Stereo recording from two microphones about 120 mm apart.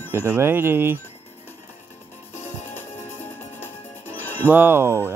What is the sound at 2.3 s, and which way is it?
Music, 65° left (ahead or behind).